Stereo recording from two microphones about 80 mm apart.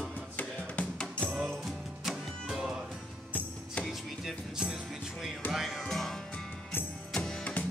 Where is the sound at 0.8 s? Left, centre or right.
Centre.